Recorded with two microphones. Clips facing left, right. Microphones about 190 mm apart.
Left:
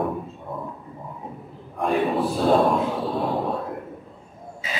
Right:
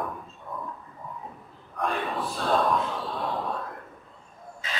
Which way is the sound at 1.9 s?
25° left (ahead or behind).